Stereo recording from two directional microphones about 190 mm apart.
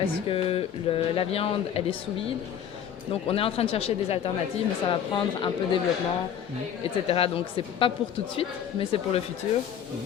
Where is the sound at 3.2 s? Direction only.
30° left (ahead or behind).